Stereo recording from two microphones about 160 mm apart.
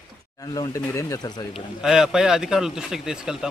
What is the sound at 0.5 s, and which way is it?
Speech, 25° left (ahead or behind).